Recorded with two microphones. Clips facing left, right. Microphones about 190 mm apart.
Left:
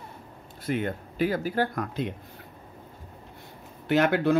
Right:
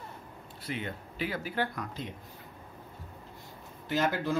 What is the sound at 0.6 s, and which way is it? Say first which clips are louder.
Speech: left 9 dB; 50° left (ahead or behind).